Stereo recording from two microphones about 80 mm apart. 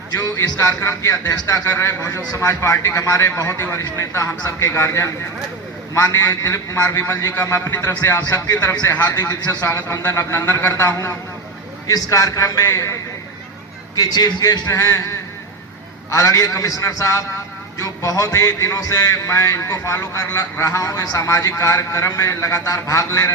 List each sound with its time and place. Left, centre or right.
0.3 s a man's voice: left
8.9 s a man's voice: left
9.5 s a man's voice: left
11.9 s a man's voice: left
13.9 s a man's voice: left
16.0 s a man's voice: left